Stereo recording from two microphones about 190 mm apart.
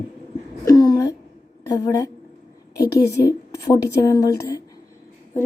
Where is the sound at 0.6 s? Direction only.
20° left (ahead or behind).